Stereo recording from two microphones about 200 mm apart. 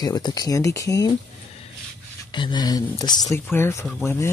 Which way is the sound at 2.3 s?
20° left (ahead or behind).